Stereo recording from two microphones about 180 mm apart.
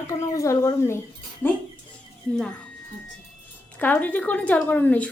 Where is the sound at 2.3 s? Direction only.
5° left (ahead or behind).